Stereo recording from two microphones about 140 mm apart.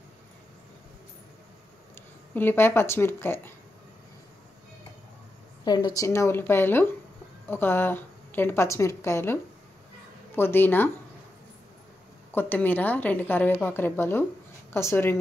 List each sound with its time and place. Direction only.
2.3 s a woman's voice: 15° left (ahead or behind)
5.7 s a woman's voice: 30° left (ahead or behind)
12.3 s a woman's voice: 15° left (ahead or behind)